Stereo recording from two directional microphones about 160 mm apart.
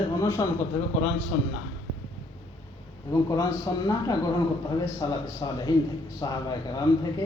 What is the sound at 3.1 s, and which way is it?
A man's voice, 20° left (ahead or behind).